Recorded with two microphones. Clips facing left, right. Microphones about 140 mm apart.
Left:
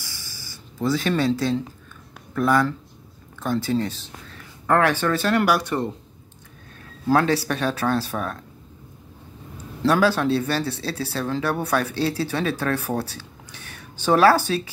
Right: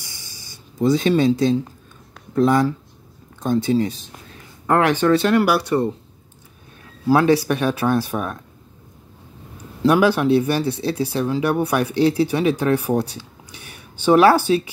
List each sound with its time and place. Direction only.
0.0 s a sound: 20° right (ahead or behind)
2.3 s speech: 20° right (ahead or behind)
7.1 s speech: 15° right (ahead or behind)
9.8 s speech: 15° right (ahead or behind)